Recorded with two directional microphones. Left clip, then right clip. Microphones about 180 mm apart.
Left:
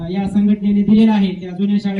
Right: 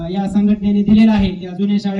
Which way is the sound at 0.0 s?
10° left (ahead or behind).